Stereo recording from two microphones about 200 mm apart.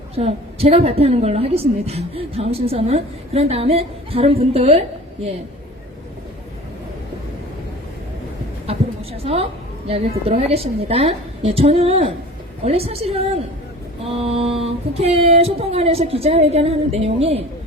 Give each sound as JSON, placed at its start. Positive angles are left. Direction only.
{"t": 0.2, "sound": "a woman's voice", "side_deg": -30}
{"t": 9.2, "sound": "female singing", "side_deg": -30}